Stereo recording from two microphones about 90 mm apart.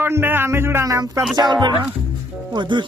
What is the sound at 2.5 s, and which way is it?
Speech, 60° right (ahead or behind).